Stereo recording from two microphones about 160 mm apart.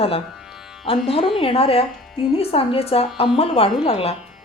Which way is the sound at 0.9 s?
35° left (ahead or behind).